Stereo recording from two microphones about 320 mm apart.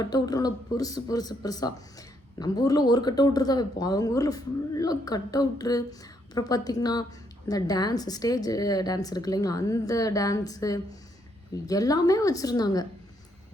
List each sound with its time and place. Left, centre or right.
0.0 s speech: centre